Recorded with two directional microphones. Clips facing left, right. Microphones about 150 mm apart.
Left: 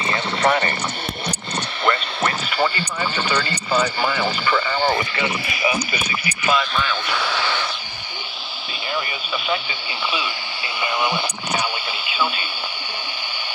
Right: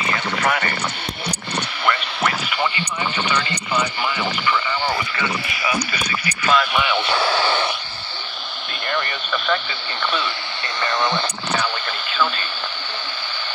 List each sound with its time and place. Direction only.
0.1 s a sound: 30° left (ahead or behind)
1.9 s radio: 35° left (ahead or behind)
3.3 s speech: 35° left (ahead or behind)
6.4 s speech: 5° left (ahead or behind)
6.7 s speech: 15° right (ahead or behind)
8.8 s speech: 5° left (ahead or behind)